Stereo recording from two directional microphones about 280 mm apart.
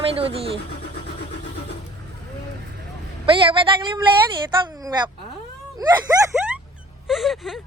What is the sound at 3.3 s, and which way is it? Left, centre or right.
Speech, centre.